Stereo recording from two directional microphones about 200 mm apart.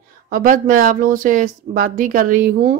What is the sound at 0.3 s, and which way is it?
Speech, 45° right (ahead or behind).